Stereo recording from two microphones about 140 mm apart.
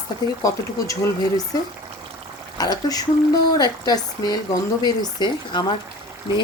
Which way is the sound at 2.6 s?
25° left (ahead or behind).